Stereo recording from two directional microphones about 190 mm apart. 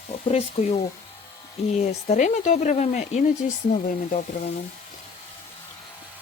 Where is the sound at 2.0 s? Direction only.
40° left (ahead or behind).